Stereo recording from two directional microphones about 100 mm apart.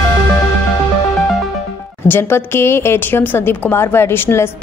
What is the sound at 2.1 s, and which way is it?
Speech, 20° left (ahead or behind).